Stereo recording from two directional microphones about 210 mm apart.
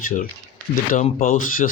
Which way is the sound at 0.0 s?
40° left (ahead or behind).